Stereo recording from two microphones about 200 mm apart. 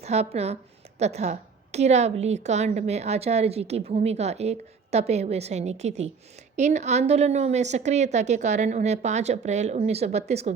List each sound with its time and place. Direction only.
0.0 s a woman's voice: 30° right (ahead or behind)